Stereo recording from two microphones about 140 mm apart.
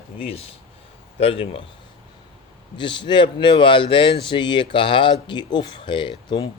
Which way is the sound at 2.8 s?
35° left (ahead or behind).